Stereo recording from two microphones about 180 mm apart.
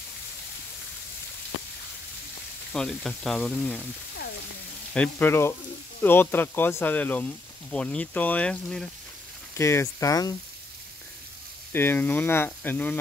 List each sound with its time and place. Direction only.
2.7 s frying: centre (ahead or behind)
4.9 s speech: 10° left (ahead or behind)
9.6 s speech: 15° left (ahead or behind)
11.7 s speech: 10° left (ahead or behind)